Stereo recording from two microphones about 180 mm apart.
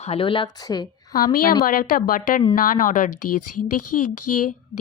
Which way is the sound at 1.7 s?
55° left (ahead or behind).